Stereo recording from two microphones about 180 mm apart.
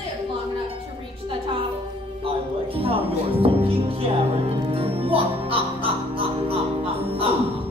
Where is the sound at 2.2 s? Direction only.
30° right (ahead or behind).